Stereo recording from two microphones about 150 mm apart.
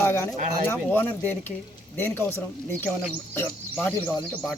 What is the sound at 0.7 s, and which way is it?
Speech, 15° left (ahead or behind).